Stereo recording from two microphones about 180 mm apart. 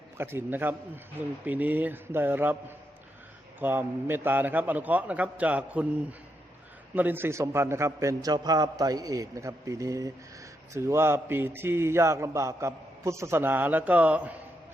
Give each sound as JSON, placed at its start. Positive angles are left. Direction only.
{"t": 0.2, "sound": "a man's voice", "side_deg": -10}